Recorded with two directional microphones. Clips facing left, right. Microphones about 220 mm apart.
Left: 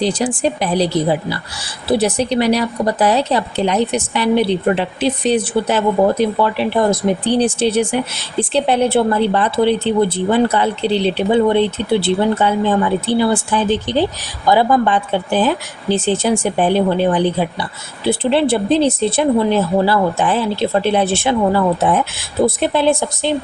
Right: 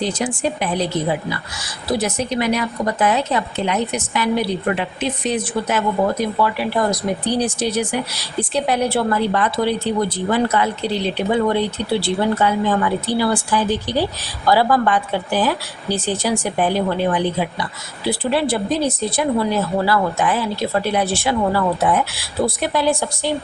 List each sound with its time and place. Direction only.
0.0 s a woman's voice: 35° left (ahead or behind)